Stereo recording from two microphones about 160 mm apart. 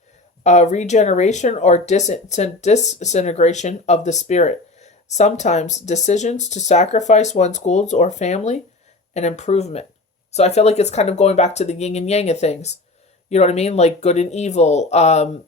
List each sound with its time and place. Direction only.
0.4 s speech: 45° left (ahead or behind)